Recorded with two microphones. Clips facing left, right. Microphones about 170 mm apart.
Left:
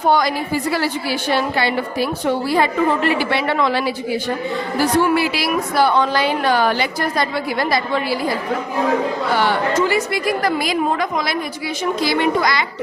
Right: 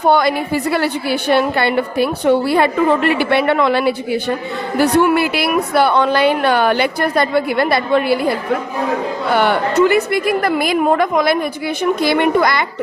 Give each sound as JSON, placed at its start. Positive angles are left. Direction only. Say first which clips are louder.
{"t": 0.1, "sound": "a woman's voice", "louder": "right 3 dB", "side_deg": -60}
{"t": 9.3, "sound": "a woman's voice", "louder": "right 4 dB", "side_deg": -60}